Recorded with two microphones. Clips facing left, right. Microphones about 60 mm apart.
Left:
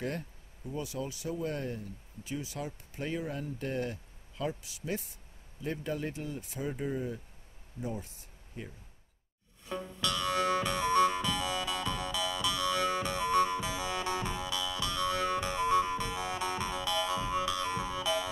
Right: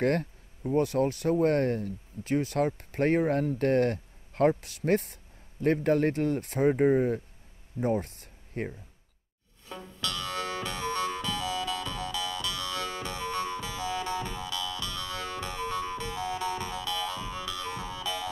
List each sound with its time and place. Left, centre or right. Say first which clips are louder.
0.0 s speech: right 10 dB; right
9.7 s music: left 2 dB; centre